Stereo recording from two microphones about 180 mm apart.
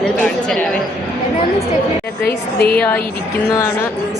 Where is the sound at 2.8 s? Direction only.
10° left (ahead or behind).